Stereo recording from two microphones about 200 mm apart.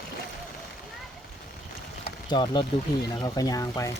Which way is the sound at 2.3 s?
25° left (ahead or behind).